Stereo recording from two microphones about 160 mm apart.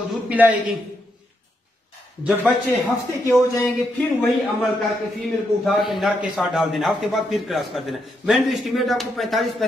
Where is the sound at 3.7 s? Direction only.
Centre (ahead or behind).